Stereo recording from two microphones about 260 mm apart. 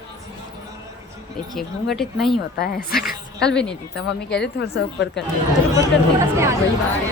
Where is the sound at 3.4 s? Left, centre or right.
Centre.